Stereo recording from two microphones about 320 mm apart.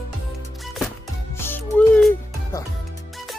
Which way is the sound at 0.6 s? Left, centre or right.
Centre.